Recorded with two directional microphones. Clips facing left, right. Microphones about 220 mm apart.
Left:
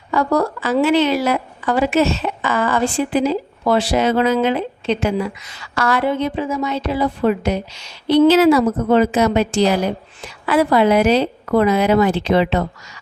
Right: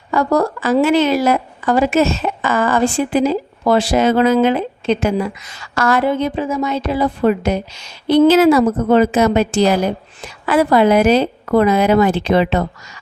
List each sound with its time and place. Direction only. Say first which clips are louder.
0.1 s a woman's voice: right 2 dB; 45° right (ahead or behind)